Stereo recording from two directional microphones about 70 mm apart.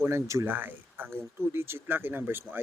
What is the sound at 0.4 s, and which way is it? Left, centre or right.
Speech, right.